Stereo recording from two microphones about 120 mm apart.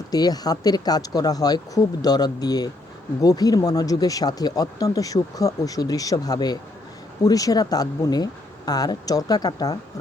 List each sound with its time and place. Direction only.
0.1 s speech: 35° left (ahead or behind)